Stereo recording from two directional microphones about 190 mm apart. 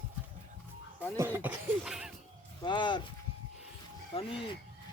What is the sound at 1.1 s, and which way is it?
Speech, 15° right (ahead or behind).